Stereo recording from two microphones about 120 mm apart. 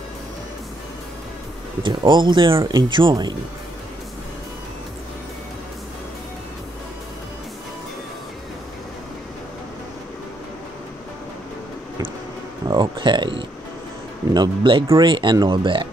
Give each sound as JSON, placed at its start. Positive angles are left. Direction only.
{"t": 1.8, "sound": "speech", "side_deg": -40}
{"t": 12.6, "sound": "speech", "side_deg": -40}